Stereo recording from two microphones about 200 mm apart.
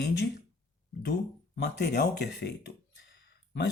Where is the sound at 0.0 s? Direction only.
55° left (ahead or behind).